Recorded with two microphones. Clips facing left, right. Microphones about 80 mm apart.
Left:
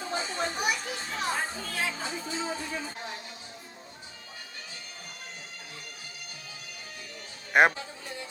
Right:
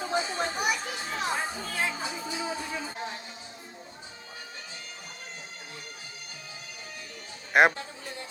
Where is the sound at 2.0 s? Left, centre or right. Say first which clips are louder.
Even; centre.